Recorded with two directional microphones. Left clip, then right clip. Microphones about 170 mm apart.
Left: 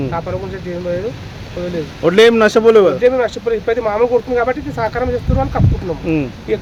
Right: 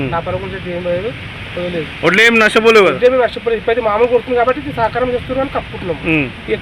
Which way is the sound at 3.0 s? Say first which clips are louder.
Right 2 dB; 20° left (ahead or behind).